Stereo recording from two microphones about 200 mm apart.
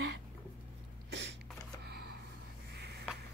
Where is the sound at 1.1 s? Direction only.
60° right (ahead or behind).